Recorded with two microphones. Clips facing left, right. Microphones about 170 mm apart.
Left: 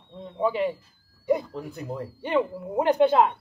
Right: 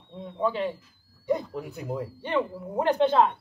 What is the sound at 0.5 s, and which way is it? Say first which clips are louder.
Speech: left 3 dB; 10° left (ahead or behind).